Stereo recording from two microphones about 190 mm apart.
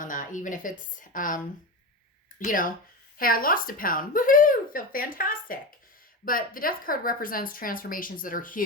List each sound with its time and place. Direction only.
0.0 s a woman's voice: 45° left (ahead or behind)
2.4 s a woman's voice: 45° left (ahead or behind)